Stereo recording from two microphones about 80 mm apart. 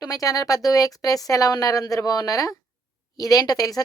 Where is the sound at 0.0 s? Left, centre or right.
Left.